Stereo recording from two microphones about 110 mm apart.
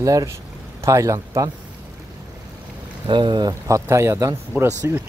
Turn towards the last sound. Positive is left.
turn(degrees=-25)  # may be behind; listen again after turning